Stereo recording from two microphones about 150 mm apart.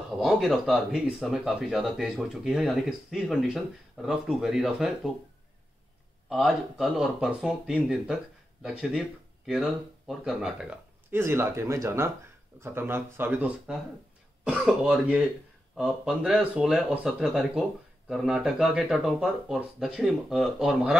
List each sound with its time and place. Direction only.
0.2 s speech: centre (ahead or behind)
6.2 s speech: centre (ahead or behind)
9.5 s speech: 5° right (ahead or behind)